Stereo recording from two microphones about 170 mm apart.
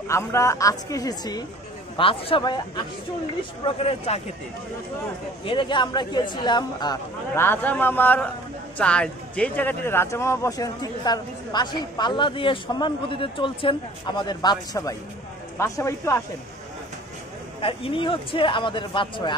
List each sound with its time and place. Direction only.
0.1 s speech: 15° left (ahead or behind)
3.6 s speech: 35° left (ahead or behind)
5.4 s speech: 30° left (ahead or behind)
7.3 s a man's voice: 10° left (ahead or behind)
17.6 s speech: 30° left (ahead or behind)